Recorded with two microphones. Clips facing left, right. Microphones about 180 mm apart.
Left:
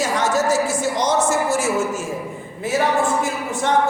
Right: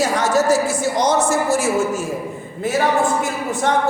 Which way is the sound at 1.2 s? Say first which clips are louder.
Right 1 dB; 10° right (ahead or behind).